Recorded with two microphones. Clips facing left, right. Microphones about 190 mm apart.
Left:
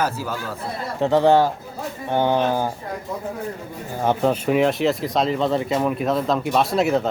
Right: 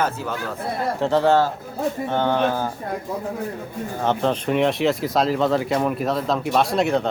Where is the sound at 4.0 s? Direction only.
10° left (ahead or behind).